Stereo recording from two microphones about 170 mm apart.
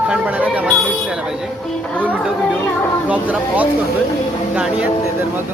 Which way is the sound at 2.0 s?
10° right (ahead or behind).